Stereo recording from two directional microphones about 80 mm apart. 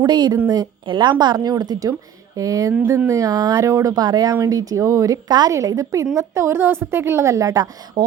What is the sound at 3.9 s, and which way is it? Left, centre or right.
A woman's voice, right.